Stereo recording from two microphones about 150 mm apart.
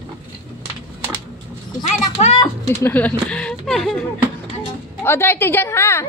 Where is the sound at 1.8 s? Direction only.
45° left (ahead or behind).